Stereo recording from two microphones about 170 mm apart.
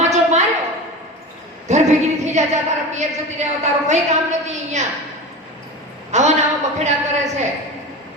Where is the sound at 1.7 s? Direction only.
40° right (ahead or behind).